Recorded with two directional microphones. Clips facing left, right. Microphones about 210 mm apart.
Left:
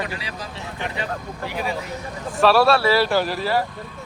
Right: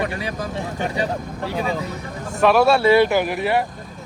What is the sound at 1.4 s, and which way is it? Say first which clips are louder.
Speech: right 3 dB; 30° right (ahead or behind).